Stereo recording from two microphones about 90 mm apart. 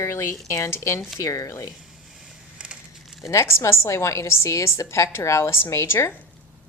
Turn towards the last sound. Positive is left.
turn(degrees=30)  # may be behind; listen again after turning